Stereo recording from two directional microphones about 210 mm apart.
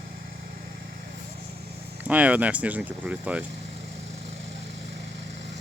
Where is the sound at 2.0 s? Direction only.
5° right (ahead or behind).